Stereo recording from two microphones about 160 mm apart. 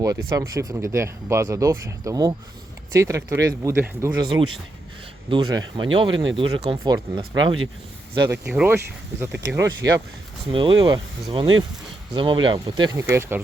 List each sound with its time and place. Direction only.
0.0 s speech: 20° right (ahead or behind)
5.3 s speech: 25° right (ahead or behind)
8.3 s speech: 10° right (ahead or behind); by 13.0 s 30° right (ahead or behind)
13.0 s speech: 15° right (ahead or behind)